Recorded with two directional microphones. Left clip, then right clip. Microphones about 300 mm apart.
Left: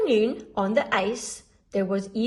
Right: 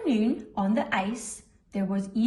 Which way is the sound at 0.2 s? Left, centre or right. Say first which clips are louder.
Left 5 dB; left.